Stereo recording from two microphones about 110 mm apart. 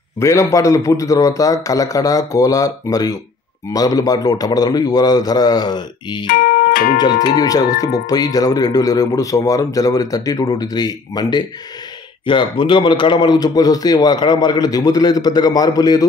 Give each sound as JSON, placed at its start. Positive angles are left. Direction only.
{"t": 0.2, "sound": "speech", "side_deg": 30}